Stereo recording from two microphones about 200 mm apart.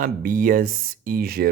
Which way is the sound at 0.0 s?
45° right (ahead or behind).